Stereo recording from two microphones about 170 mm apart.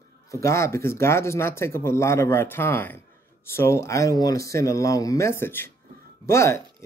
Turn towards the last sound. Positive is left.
turn(degrees=15)  # may be behind; listen again after turning